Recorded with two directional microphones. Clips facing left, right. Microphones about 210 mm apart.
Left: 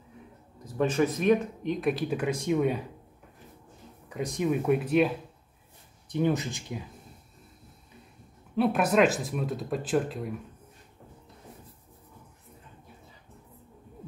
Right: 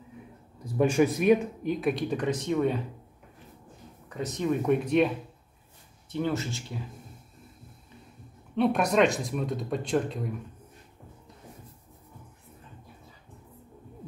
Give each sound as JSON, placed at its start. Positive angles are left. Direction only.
{"t": 0.7, "sound": "speech", "side_deg": -10}
{"t": 4.1, "sound": "speech", "side_deg": 10}
{"t": 6.0, "sound": "speech", "side_deg": 15}
{"t": 8.5, "sound": "speech", "side_deg": 5}